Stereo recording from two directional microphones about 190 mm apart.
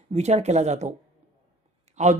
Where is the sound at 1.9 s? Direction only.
40° right (ahead or behind).